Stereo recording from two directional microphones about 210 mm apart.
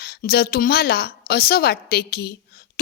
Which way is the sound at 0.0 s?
45° left (ahead or behind).